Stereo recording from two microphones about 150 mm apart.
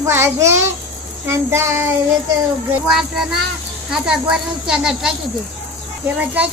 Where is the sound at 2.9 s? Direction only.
5° right (ahead or behind).